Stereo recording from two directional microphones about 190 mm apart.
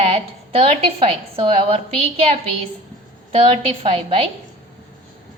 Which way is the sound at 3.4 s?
30° right (ahead or behind).